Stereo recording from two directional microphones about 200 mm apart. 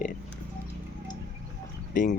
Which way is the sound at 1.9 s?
40° left (ahead or behind).